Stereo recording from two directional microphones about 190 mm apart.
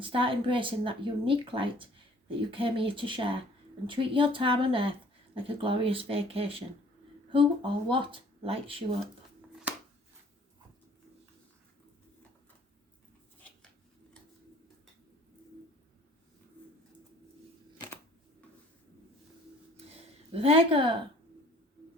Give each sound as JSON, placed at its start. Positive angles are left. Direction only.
{"t": 0.0, "sound": "speech", "side_deg": -25}
{"t": 20.3, "sound": "speech", "side_deg": -30}